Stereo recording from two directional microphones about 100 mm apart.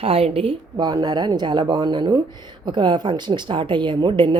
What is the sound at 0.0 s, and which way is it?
Speech, 70° right (ahead or behind).